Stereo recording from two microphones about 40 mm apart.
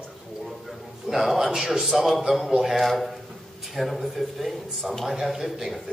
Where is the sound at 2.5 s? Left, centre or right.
Centre.